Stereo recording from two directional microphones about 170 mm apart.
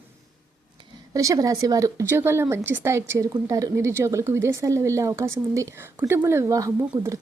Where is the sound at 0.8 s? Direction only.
20° right (ahead or behind).